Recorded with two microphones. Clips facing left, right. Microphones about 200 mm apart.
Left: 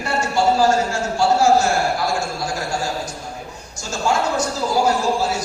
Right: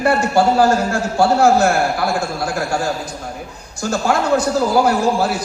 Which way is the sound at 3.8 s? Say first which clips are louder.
Right 3 dB; 60° right (ahead or behind).